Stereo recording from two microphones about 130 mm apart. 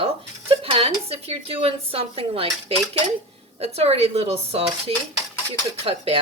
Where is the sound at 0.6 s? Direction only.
45° right (ahead or behind).